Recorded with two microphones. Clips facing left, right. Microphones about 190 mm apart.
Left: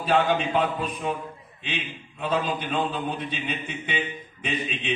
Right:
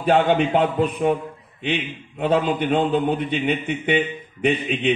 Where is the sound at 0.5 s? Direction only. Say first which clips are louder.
Right 6 dB; 60° right (ahead or behind).